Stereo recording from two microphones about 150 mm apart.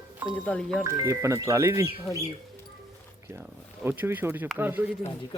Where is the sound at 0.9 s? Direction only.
20° right (ahead or behind).